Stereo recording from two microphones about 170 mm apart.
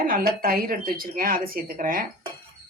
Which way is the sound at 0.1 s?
60° right (ahead or behind).